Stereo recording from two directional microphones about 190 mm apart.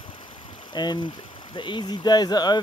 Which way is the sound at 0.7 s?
20° left (ahead or behind).